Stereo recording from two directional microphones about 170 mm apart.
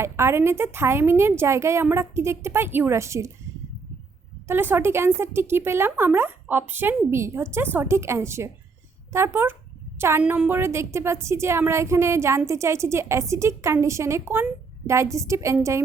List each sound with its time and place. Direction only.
0.0 s speech: 15° right (ahead or behind)
4.4 s speech: 10° right (ahead or behind)